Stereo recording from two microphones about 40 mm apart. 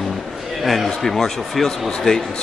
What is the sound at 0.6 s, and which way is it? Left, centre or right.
Speech, centre.